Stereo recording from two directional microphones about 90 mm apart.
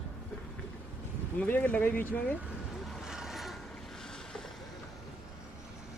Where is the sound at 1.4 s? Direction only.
20° left (ahead or behind).